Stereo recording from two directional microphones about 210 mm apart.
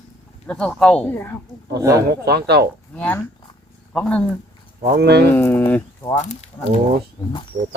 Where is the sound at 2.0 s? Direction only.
50° right (ahead or behind).